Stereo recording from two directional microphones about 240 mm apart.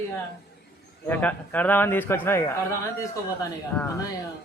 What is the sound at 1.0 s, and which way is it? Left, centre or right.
A man's voice, centre.